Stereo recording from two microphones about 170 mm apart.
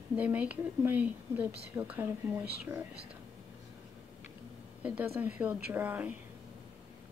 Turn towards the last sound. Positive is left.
turn(degrees=-10)  # may be behind; listen again after turning